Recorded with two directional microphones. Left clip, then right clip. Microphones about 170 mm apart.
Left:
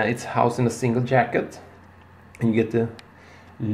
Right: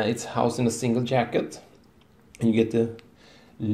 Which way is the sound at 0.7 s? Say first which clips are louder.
Left 3 dB; 15° right (ahead or behind).